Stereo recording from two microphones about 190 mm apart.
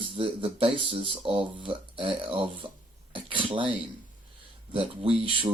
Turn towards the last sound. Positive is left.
turn(degrees=-30)  # may be behind; listen again after turning